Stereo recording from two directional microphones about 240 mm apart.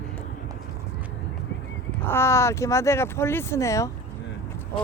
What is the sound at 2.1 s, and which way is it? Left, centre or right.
Speech, centre.